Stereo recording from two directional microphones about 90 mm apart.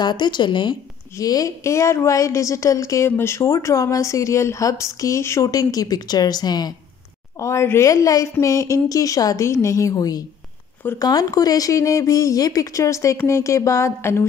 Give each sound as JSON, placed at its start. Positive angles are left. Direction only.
{"t": 0.0, "sound": "speech", "side_deg": 55}
{"t": 1.1, "sound": "speech", "side_deg": 40}
{"t": 7.3, "sound": "speech", "side_deg": 30}